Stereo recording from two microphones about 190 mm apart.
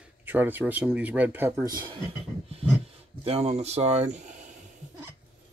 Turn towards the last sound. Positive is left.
turn(degrees=-40)  # may be behind; listen again after turning